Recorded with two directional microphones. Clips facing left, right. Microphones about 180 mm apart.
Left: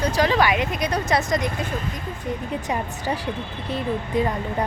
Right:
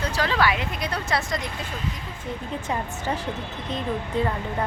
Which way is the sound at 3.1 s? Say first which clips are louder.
Left 2 dB; 10° left (ahead or behind).